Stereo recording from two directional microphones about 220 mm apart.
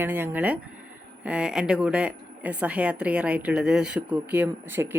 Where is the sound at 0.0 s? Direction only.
10° right (ahead or behind).